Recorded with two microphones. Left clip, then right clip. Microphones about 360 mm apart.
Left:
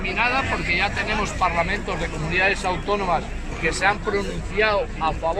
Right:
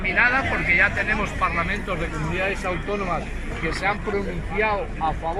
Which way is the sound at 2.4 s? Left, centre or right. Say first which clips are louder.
Left 4 dB; left.